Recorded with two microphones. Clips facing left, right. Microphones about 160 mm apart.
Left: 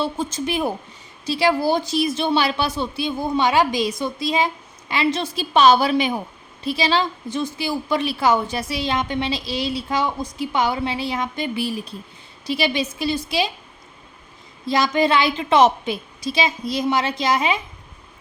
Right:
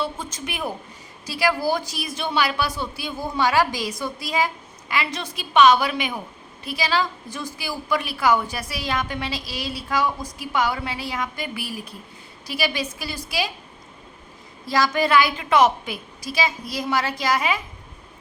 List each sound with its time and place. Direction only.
0.0 s a woman's voice: 30° left (ahead or behind)
14.7 s a woman's voice: 20° left (ahead or behind)